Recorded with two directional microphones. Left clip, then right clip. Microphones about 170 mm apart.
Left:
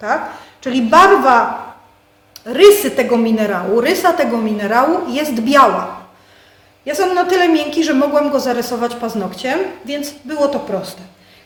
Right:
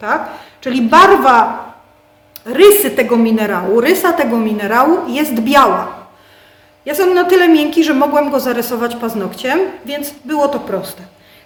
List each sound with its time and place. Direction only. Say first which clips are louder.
0.0 s speech: right 1 dB; 20° right (ahead or behind)
2.4 s speech: right 1 dB; 25° right (ahead or behind)
6.8 s speech: right 3 dB; 25° right (ahead or behind)